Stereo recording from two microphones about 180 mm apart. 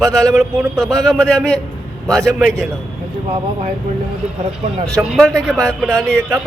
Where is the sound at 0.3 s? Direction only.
Centre (ahead or behind).